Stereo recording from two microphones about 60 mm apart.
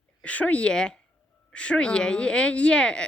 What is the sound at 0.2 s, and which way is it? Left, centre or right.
Speech, left.